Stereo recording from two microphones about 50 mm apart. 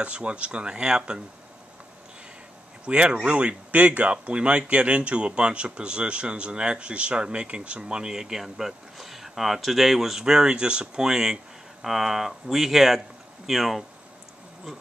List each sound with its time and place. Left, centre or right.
0.0 s speech: right
2.8 s speech: right; by 13.8 s centre